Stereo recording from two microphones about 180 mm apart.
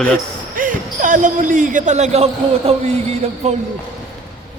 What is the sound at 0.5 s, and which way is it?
Speech, 50° right (ahead or behind).